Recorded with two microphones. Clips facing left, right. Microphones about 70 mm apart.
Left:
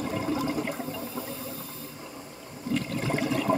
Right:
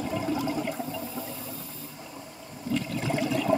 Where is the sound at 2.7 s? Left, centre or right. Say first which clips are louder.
Even; left.